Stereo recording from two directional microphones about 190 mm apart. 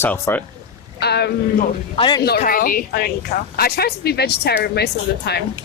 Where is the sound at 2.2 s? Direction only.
55° left (ahead or behind).